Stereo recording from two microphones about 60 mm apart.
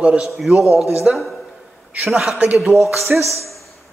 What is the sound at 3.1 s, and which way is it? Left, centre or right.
Speech, right.